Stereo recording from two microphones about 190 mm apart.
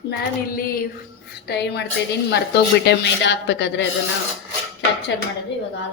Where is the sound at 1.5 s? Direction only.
60° left (ahead or behind).